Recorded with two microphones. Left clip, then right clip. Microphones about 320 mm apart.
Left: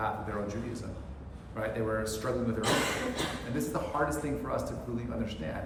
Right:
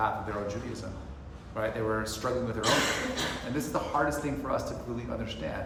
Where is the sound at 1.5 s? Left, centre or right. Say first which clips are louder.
Right 2 dB; centre.